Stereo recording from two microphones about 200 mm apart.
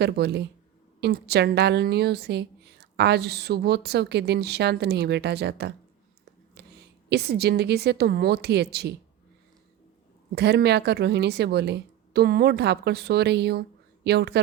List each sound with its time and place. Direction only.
0.0 s a woman's voice: 55° right (ahead or behind)
6.6 s a sound: 55° right (ahead or behind)
7.1 s a woman's voice: 55° right (ahead or behind)
10.3 s a woman's voice: 55° right (ahead or behind)